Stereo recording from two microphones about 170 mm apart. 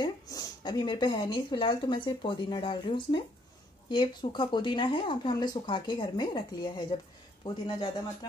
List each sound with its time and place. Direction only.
0.0 s speech: 25° left (ahead or behind)